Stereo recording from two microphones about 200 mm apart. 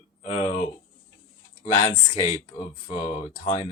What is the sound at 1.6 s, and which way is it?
Speech, 35° left (ahead or behind).